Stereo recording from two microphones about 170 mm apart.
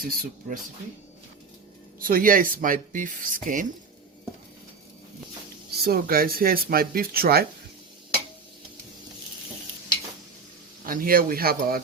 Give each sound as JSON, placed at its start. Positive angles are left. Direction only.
{"t": 0.0, "sound": "speech", "side_deg": -60}
{"t": 2.0, "sound": "speech", "side_deg": -55}
{"t": 5.7, "sound": "speech", "side_deg": -65}
{"t": 10.8, "sound": "speech", "side_deg": -60}